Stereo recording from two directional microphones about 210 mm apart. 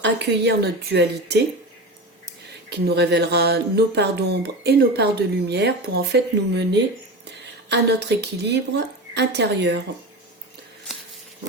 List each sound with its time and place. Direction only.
0.0 s speech: 55° right (ahead or behind)
2.6 s speech: 50° right (ahead or behind)